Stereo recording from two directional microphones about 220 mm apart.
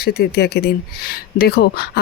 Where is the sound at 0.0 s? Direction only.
45° left (ahead or behind).